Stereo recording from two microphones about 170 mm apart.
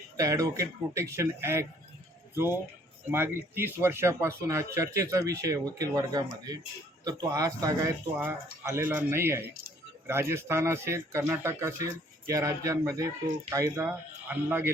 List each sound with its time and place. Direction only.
0.2 s a man's voice: 20° right (ahead or behind)